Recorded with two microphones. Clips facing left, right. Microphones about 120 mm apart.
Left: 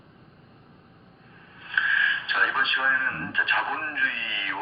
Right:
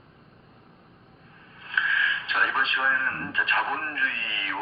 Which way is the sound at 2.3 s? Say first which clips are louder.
Right 1 dB; centre (ahead or behind).